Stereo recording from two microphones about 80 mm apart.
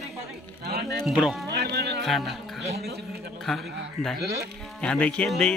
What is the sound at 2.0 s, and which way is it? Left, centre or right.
Speech, centre.